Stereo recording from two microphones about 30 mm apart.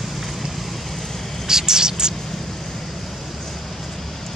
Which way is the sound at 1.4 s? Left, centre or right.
Centre.